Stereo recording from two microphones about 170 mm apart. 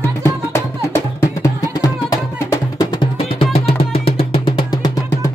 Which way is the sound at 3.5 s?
35° left (ahead or behind).